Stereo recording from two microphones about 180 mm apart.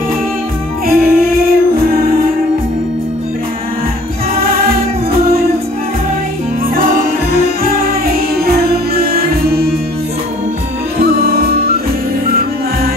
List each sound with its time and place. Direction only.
0.8 s music: 55° right (ahead or behind)
4.4 s music: 55° right (ahead or behind)
6.7 s music: 55° right (ahead or behind)
11.1 s music: 60° right (ahead or behind)